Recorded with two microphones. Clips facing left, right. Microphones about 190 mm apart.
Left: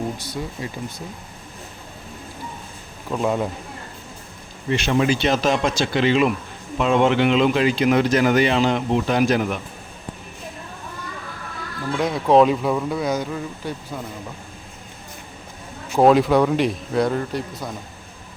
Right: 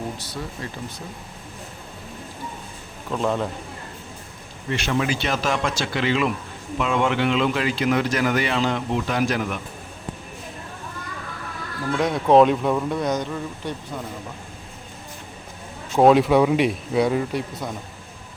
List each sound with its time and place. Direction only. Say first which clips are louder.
0.3 s speech: left 3 dB; 15° left (ahead or behind)
3.1 s speech: left 2 dB; 10° left (ahead or behind)
4.7 s speech: left 4 dB; 25° left (ahead or behind)
11.9 s speech: even; centre (ahead or behind)
16.0 s speech: even; centre (ahead or behind)